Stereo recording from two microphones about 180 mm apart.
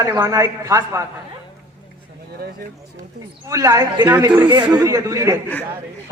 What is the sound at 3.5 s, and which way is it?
A man's voice, 15° right (ahead or behind).